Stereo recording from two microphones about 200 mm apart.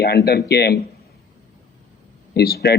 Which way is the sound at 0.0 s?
55° left (ahead or behind).